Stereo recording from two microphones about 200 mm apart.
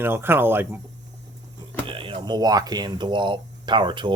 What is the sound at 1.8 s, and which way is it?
Speech, 25° right (ahead or behind).